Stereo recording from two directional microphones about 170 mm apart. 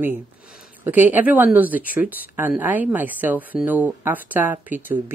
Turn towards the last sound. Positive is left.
turn(degrees=-10)  # may be behind; listen again after turning